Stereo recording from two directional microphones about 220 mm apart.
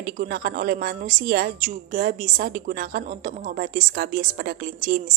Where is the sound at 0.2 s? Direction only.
40° right (ahead or behind).